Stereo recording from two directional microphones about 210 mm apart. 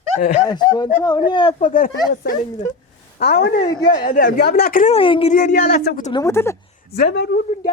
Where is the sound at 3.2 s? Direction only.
50° left (ahead or behind).